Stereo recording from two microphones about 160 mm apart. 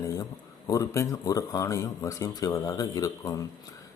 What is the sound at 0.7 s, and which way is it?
Speech, 20° left (ahead or behind).